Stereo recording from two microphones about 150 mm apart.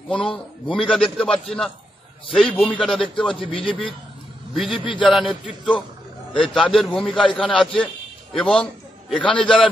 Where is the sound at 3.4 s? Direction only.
35° left (ahead or behind).